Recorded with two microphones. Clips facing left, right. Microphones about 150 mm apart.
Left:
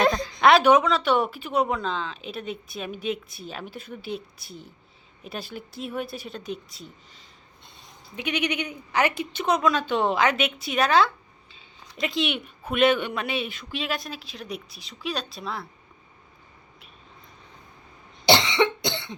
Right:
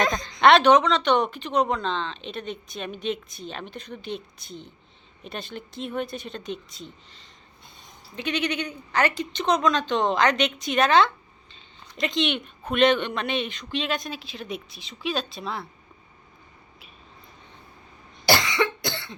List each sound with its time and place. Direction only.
0.1 s a woman's voice: 5° left (ahead or behind)
18.3 s cough: 25° left (ahead or behind)